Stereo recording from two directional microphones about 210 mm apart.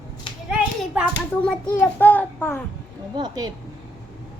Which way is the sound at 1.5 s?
5° left (ahead or behind).